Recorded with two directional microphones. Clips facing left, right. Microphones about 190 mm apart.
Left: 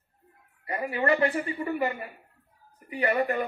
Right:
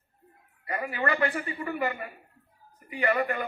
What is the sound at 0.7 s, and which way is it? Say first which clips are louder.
Speech: left 3 dB; 25° left (ahead or behind).